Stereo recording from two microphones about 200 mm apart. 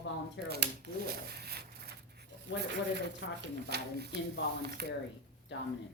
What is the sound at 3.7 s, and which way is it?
Speech, 55° right (ahead or behind).